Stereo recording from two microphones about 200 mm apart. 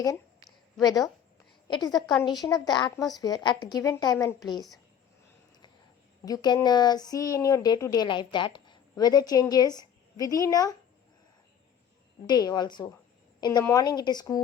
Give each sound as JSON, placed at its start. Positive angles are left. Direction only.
{"t": 0.0, "sound": "a sound", "side_deg": 15}
{"t": 1.6, "sound": "a woman's voice", "side_deg": 20}
{"t": 2.0, "sound": "a woman's voice", "side_deg": 0}
{"t": 2.2, "sound": "speech", "side_deg": 20}
{"t": 6.2, "sound": "speech", "side_deg": 20}
{"t": 12.2, "sound": "speech", "side_deg": 20}